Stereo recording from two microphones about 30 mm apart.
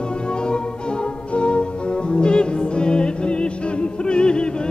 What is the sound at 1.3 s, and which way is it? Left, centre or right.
Music, left.